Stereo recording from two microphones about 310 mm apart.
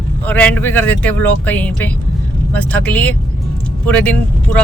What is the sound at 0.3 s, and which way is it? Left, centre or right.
Speech, centre.